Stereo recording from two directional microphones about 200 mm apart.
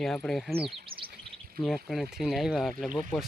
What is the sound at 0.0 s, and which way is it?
Speech, 5° left (ahead or behind).